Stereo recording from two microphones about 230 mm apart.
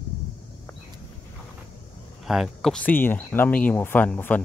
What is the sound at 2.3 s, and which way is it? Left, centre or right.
Speech, centre.